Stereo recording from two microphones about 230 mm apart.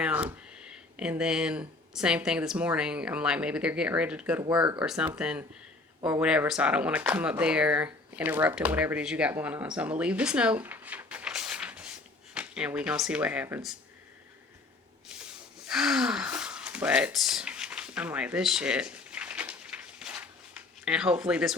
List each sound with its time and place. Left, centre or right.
0.0 s speech: centre
15.6 s gasp: centre
20.8 s speech: centre